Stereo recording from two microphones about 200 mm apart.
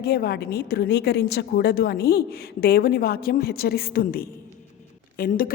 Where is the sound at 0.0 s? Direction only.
50° left (ahead or behind).